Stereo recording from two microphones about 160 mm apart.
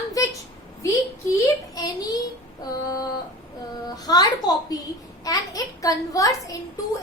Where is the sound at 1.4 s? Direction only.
25° left (ahead or behind).